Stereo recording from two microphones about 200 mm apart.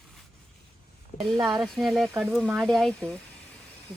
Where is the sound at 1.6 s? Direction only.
Centre (ahead or behind).